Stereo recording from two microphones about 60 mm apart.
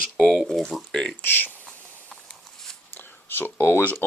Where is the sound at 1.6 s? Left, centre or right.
Centre.